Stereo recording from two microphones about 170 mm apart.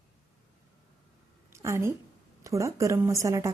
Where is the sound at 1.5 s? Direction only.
15° right (ahead or behind).